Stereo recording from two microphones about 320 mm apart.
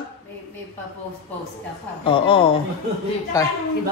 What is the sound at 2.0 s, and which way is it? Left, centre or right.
Speech, centre.